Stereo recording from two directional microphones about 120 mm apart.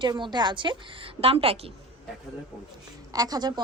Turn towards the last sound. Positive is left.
turn(degrees=-35)  # may be behind; listen again after turning